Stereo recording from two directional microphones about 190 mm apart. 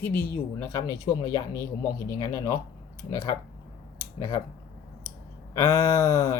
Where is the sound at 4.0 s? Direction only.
15° left (ahead or behind).